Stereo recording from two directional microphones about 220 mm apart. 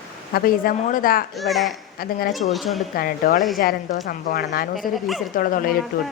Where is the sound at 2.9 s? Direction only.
40° left (ahead or behind).